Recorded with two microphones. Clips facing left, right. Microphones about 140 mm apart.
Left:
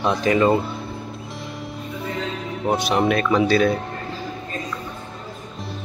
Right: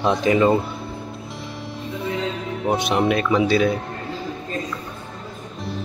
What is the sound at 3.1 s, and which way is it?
Speech, 10° right (ahead or behind).